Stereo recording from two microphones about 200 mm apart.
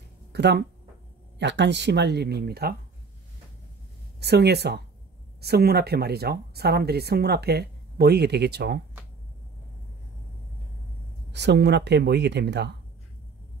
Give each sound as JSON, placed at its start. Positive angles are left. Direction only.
{"t": 0.3, "sound": "speech", "side_deg": -55}
{"t": 4.2, "sound": "speech", "side_deg": -55}
{"t": 11.3, "sound": "speech", "side_deg": -55}